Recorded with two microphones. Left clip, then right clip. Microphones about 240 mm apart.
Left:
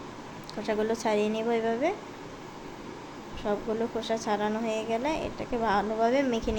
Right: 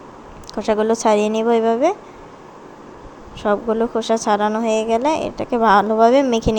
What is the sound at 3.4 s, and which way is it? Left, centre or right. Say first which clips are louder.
Speech: right 12 dB; right.